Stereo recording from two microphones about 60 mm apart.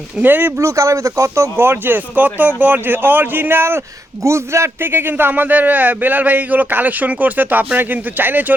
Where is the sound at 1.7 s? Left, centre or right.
Right.